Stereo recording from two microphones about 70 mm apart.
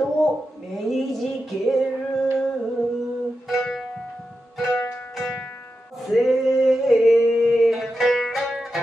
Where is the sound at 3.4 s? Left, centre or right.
Centre.